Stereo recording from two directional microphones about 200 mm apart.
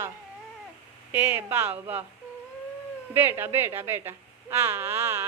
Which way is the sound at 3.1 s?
10° right (ahead or behind).